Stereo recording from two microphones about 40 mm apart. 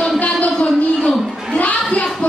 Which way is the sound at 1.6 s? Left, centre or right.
Left.